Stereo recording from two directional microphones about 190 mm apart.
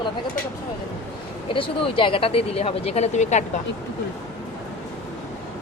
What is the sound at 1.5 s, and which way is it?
Speech, 25° left (ahead or behind).